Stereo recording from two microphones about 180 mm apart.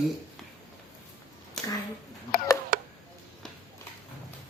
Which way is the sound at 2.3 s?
55° left (ahead or behind).